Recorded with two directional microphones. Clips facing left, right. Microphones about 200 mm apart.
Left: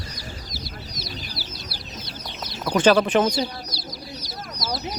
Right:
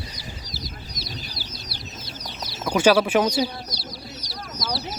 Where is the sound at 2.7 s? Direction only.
10° right (ahead or behind).